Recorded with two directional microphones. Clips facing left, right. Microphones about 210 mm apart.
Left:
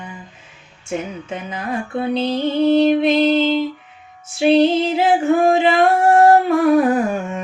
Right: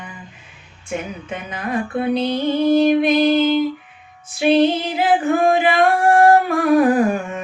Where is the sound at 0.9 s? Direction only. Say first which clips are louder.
Left 2 dB; 25° left (ahead or behind).